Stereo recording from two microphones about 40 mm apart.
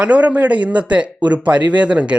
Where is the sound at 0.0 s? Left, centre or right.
Right.